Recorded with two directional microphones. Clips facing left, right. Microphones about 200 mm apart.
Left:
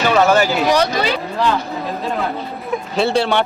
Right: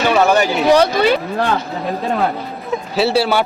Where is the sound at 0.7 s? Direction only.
55° right (ahead or behind).